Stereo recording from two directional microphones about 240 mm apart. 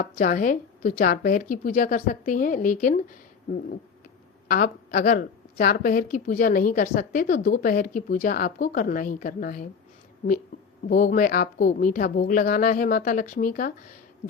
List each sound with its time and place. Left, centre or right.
0.0 s a woman's voice: left
4.4 s a woman's voice: left
10.8 s a woman's voice: left